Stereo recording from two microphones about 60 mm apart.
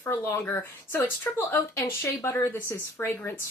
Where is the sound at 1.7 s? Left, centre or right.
Left.